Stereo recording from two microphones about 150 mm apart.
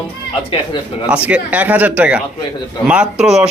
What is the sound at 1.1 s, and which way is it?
Speech, 10° right (ahead or behind).